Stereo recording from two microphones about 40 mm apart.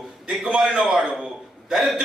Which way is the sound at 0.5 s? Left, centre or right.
Right.